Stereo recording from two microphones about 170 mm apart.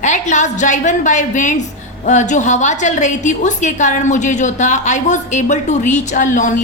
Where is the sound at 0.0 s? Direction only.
45° left (ahead or behind).